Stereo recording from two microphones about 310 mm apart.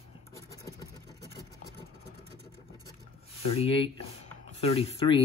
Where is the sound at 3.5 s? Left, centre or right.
Centre.